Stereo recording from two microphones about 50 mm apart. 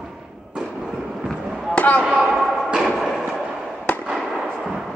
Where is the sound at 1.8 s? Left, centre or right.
Left.